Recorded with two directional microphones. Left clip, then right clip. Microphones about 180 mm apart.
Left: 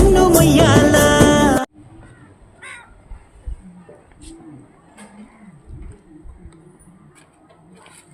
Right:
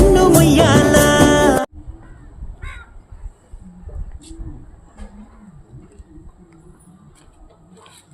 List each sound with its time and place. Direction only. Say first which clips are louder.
0.1 s music: right 1 dB; centre (ahead or behind)